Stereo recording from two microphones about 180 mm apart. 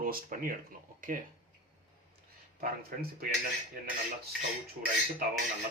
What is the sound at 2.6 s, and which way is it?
Speech, 55° right (ahead or behind).